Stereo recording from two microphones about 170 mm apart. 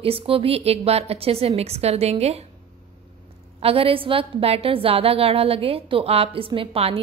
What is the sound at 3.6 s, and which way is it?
A woman's voice, 35° right (ahead or behind).